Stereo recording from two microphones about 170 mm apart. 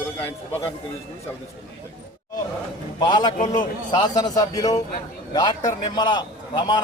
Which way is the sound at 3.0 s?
25° left (ahead or behind).